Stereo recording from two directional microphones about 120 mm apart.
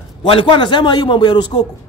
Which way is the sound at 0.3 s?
45° left (ahead or behind).